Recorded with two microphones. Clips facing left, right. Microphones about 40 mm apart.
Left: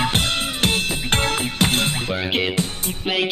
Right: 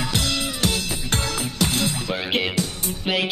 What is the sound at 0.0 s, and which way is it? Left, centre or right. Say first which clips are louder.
Music: left 3 dB; left.